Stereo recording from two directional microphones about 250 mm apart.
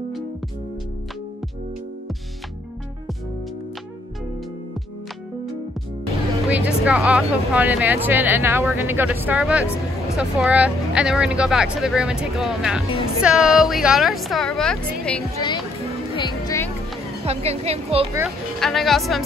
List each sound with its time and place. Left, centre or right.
6.5 s speech: centre
15.3 s a child's voice: centre
16.3 s music: centre
17.2 s speech: right
18.2 s speech: centre